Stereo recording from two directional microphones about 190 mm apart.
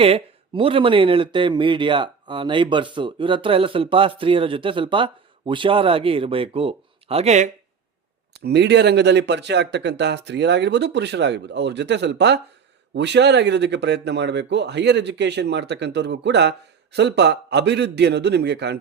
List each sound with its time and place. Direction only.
0.0 s speech: 30° right (ahead or behind)
8.3 s speech: 60° right (ahead or behind)